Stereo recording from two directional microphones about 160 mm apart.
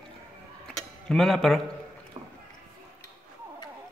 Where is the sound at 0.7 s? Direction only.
Centre (ahead or behind).